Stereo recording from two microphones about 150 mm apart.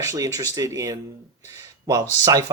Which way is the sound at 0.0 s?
20° right (ahead or behind).